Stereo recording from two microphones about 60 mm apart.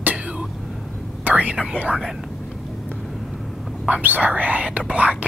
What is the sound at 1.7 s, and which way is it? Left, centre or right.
Speech, right.